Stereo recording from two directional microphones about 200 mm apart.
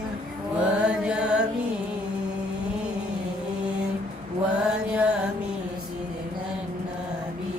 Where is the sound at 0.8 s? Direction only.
5° right (ahead or behind).